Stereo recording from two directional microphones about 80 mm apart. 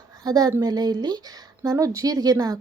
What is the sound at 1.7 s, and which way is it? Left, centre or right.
Speech, right.